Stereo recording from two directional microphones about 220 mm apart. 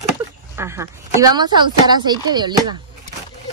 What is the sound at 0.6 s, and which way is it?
Speech, 10° right (ahead or behind).